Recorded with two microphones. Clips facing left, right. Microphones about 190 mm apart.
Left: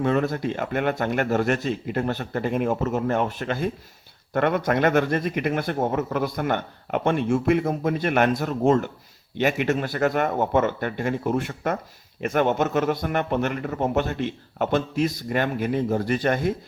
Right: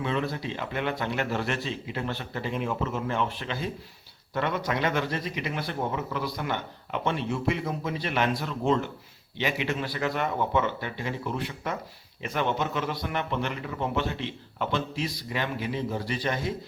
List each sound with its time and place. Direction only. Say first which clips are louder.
0.0 s a man's voice: left 7 dB; 45° left (ahead or behind)